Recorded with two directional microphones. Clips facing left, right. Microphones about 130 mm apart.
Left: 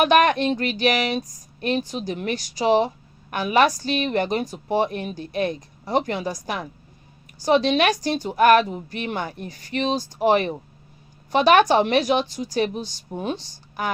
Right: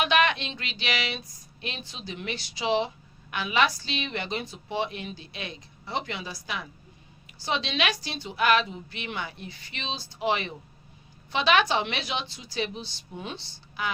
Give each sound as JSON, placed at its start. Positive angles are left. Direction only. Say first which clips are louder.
{"t": 0.0, "sound": "a woman's voice", "louder": "left 7 dB", "side_deg": 50}